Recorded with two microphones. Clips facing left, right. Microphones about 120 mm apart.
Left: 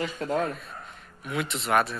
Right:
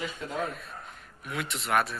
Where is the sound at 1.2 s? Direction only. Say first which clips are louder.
Left 4 dB; centre (ahead or behind).